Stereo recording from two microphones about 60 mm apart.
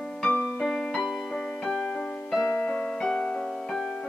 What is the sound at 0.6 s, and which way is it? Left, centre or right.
Piano, centre.